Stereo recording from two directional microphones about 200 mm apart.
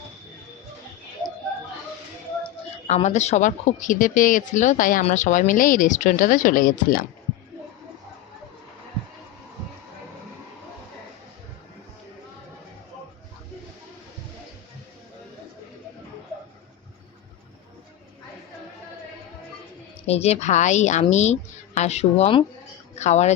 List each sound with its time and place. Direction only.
2.8 s speech: 35° left (ahead or behind)
20.1 s speech: 30° left (ahead or behind)